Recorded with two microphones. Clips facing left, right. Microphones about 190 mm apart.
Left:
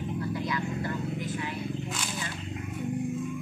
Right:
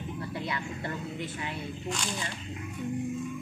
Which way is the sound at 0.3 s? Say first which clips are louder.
Left 4 dB; 25° right (ahead or behind).